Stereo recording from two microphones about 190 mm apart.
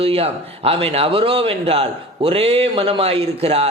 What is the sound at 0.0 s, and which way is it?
Speech, 30° right (ahead or behind).